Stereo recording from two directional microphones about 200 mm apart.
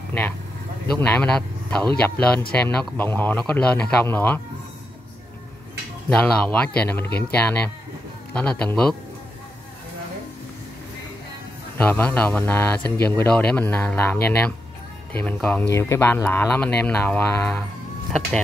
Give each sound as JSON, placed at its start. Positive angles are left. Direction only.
{"t": 0.1, "sound": "a man's voice", "side_deg": 10}
{"t": 6.0, "sound": "speech", "side_deg": 5}
{"t": 7.1, "sound": "speech", "side_deg": 55}
{"t": 7.3, "sound": "a man's voice", "side_deg": 10}
{"t": 11.8, "sound": "a man's voice", "side_deg": 10}